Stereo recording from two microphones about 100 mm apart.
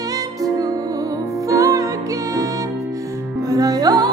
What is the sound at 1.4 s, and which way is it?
Music, 35° right (ahead or behind).